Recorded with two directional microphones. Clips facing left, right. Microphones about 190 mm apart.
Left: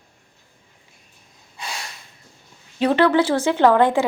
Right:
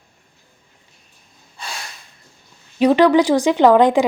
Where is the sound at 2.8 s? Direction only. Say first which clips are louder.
Right 4 dB; 15° right (ahead or behind).